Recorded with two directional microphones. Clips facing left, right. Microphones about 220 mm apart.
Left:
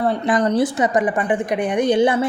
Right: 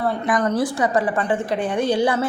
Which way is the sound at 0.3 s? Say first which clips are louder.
Left 3 dB; 20° left (ahead or behind).